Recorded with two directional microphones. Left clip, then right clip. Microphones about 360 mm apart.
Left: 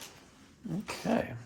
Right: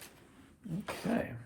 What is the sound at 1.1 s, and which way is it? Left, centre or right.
Dog, centre.